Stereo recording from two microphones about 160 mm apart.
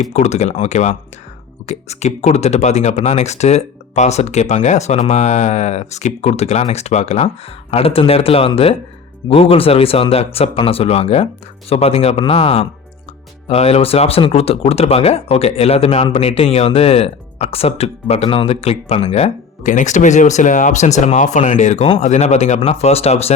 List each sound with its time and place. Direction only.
0.0 s speech: 45° left (ahead or behind)